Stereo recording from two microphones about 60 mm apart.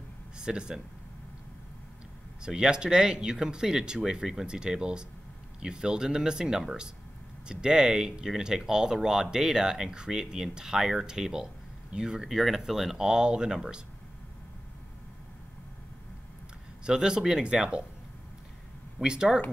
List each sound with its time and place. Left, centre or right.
0.4 s speech: centre
2.4 s speech: centre
16.8 s speech: centre
19.0 s speech: centre